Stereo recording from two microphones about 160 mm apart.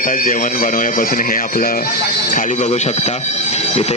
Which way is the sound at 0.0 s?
55° left (ahead or behind).